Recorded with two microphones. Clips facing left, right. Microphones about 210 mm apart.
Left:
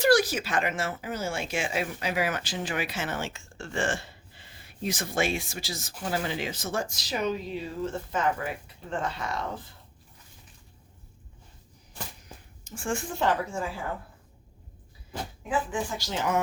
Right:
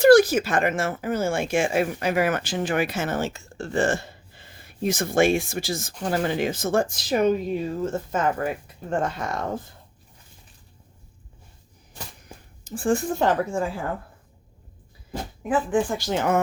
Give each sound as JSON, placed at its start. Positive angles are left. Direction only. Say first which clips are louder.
{"t": 0.0, "sound": "speech", "louder": "right 8 dB", "side_deg": -50}
{"t": 12.6, "sound": "a woman's voice", "louder": "right 9 dB", "side_deg": -35}
{"t": 15.1, "sound": "speech", "louder": "right 5 dB", "side_deg": -50}